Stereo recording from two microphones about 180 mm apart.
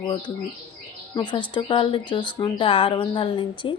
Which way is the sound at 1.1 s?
25° left (ahead or behind).